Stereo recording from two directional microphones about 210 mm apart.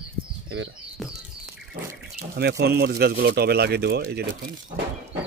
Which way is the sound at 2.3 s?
50° right (ahead or behind).